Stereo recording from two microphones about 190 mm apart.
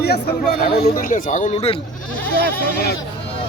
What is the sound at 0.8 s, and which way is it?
Speech, 40° left (ahead or behind).